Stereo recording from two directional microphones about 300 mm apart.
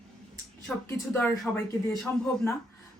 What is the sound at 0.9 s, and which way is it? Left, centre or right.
Speech, centre.